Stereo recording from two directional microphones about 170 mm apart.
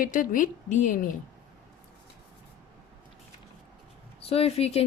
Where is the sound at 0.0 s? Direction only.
50° left (ahead or behind).